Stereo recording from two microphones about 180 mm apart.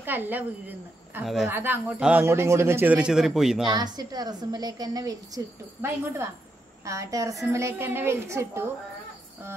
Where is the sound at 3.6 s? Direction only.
25° right (ahead or behind).